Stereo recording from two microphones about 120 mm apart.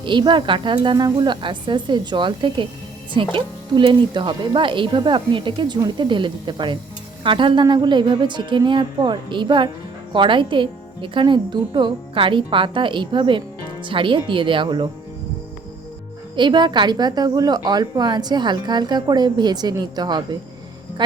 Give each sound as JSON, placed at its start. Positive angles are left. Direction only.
{"t": 0.0, "sound": "a woman's voice", "side_deg": -40}
{"t": 16.3, "sound": "a woman's voice", "side_deg": -40}